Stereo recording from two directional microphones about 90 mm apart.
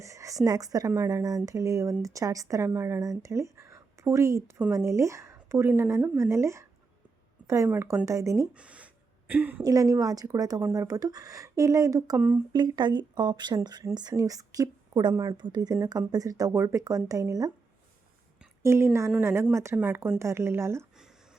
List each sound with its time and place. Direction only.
0.0 s a woman's voice: 35° right (ahead or behind)
8.5 s a sound: 15° right (ahead or behind)
9.6 s a woman's voice: 40° right (ahead or behind)
12.5 s speech: 55° right (ahead or behind)
15.1 s speech: 35° right (ahead or behind)
15.4 s a woman's voice: 55° right (ahead or behind)
16.5 s speech: 30° right (ahead or behind)
18.6 s a woman's voice: 30° right (ahead or behind)
19.8 s a woman's voice: 20° right (ahead or behind)
20.1 s speech: 30° right (ahead or behind)